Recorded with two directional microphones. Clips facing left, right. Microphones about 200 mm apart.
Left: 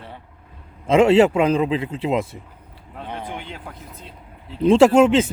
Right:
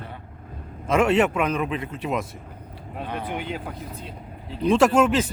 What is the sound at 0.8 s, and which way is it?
Speech, 25° left (ahead or behind).